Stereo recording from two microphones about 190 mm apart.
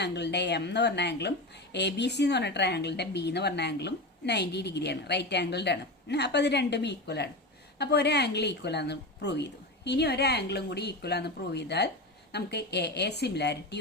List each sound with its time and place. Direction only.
0.0 s a woman's voice: 65° left (ahead or behind)